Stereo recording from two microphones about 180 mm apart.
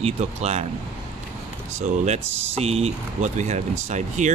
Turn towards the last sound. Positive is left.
turn(degrees=-40)  # may be behind; listen again after turning